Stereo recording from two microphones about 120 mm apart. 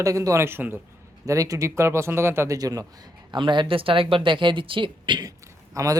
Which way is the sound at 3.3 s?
40° right (ahead or behind).